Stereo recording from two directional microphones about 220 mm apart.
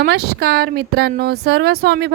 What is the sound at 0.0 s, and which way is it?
Speech, 45° right (ahead or behind).